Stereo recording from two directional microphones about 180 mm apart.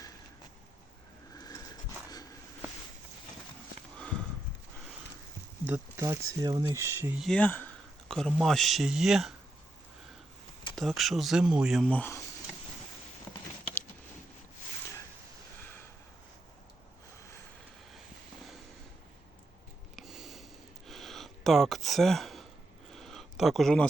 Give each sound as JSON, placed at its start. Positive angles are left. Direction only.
{"t": 1.4, "sound": "a sound", "side_deg": 20}
{"t": 3.9, "sound": "horse", "side_deg": 5}
{"t": 5.6, "sound": "speech", "side_deg": -15}
{"t": 7.2, "sound": "a man's voice", "side_deg": 5}
{"t": 10.8, "sound": "speech", "side_deg": 0}
{"t": 20.0, "sound": "a sound", "side_deg": 0}